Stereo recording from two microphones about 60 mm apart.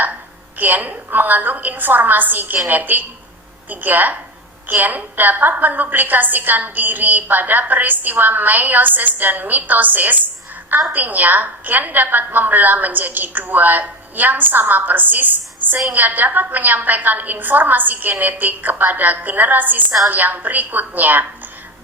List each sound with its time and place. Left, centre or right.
0.6 s a woman's voice: right